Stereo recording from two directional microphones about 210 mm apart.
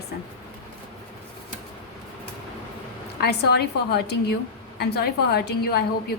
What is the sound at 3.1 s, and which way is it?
A woman's voice, 50° left (ahead or behind).